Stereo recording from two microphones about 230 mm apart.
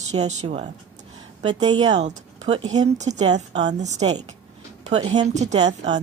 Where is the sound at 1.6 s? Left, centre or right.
Centre.